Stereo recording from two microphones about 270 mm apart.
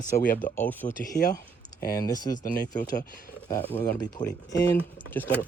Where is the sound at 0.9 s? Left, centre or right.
Left.